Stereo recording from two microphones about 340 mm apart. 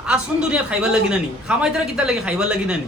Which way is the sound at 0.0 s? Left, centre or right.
Centre.